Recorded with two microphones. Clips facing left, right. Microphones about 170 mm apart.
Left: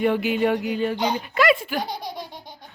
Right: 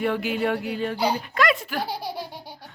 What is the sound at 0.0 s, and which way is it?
Speech, centre (ahead or behind).